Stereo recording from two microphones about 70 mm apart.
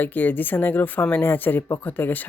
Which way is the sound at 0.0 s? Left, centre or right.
Left.